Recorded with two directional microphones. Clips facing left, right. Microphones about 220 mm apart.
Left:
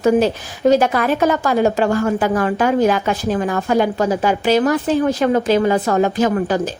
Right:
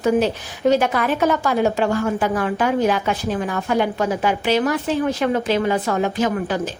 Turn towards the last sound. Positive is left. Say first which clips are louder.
# left 4 dB
turn(degrees=40)  # may be behind; listen again after turning